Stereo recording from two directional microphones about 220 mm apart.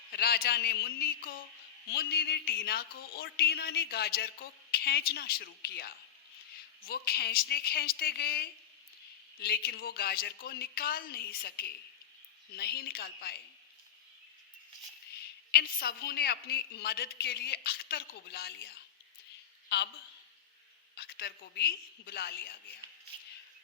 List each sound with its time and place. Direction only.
0.1 s speech: 45° left (ahead or behind)
15.5 s a woman's voice: 45° left (ahead or behind)
20.9 s speech: 45° left (ahead or behind)